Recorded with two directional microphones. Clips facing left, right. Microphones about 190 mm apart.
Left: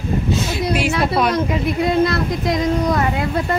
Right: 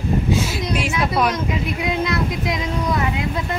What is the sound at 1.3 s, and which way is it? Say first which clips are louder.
Speech: left 5 dB; 55° left (ahead or behind).